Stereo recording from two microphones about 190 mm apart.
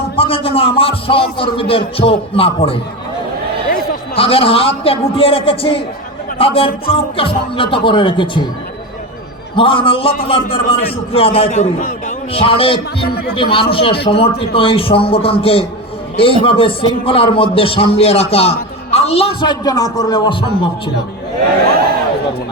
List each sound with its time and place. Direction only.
0.2 s a man's voice: 30° left (ahead or behind)
3.7 s a sound: 50° left (ahead or behind)
4.2 s a man's voice: 30° left (ahead or behind)
9.6 s a man's voice: 25° left (ahead or behind); by 12.1 s 45° left (ahead or behind)
12.3 s a man's voice: 30° left (ahead or behind)
13.1 s speech: 55° left (ahead or behind)
13.3 s a man's voice: 30° left (ahead or behind)
19.4 s a man's voice: 20° left (ahead or behind)